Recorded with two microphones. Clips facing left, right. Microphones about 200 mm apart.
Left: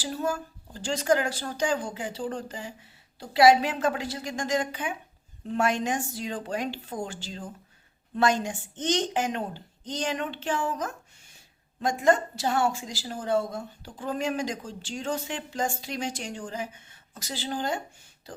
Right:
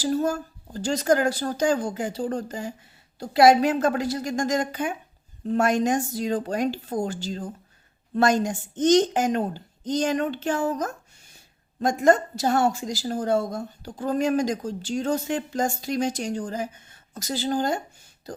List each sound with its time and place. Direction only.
0.0 s a woman's voice: 40° right (ahead or behind)